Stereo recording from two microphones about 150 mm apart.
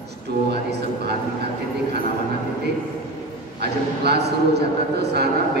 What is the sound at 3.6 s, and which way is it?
A man's voice, 90° right.